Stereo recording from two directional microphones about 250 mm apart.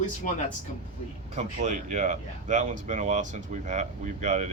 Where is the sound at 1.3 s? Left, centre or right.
Right.